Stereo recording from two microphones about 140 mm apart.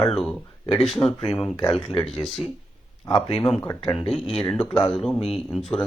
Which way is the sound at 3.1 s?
40° left (ahead or behind).